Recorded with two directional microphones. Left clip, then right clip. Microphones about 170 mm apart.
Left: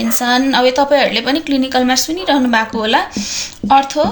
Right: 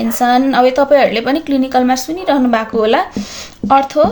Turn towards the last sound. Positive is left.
turn(degrees=-55)  # may be behind; listen again after turning